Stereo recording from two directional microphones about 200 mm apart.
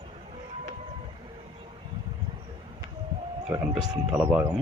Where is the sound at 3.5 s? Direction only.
5° right (ahead or behind).